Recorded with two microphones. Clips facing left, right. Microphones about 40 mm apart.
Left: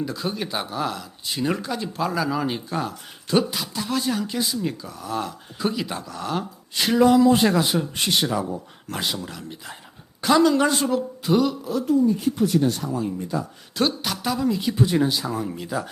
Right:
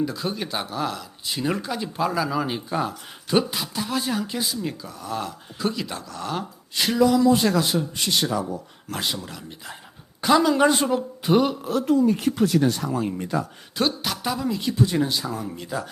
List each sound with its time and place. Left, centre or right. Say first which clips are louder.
0.0 s speech: right 1 dB; centre
7.4 s a man's voice: left 1 dB; centre
8.5 s speech: left 1 dB; centre
10.5 s a woman's voice: right 1 dB; centre
11.2 s speech: right 1 dB; right
11.6 s speech: even; right
12.9 s speech: right 1 dB; right
13.7 s speech: left 1 dB; centre